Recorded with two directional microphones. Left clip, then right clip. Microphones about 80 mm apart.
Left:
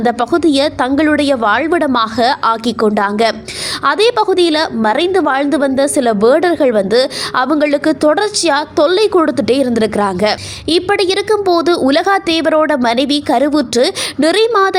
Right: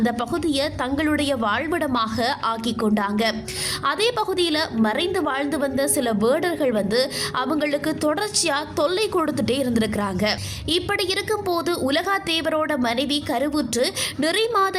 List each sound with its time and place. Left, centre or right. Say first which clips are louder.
0.0 s a woman's voice: left 11 dB; left